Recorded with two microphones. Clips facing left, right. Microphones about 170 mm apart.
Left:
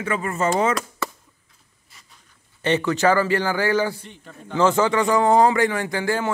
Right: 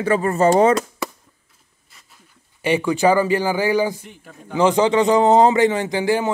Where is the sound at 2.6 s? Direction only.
10° right (ahead or behind).